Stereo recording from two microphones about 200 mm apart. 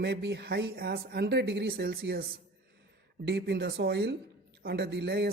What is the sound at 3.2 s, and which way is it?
A woman's voice, 55° right (ahead or behind).